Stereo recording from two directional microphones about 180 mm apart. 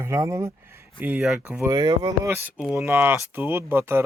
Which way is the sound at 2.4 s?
5° right (ahead or behind).